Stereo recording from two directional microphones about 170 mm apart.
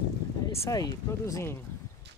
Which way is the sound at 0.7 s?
20° left (ahead or behind).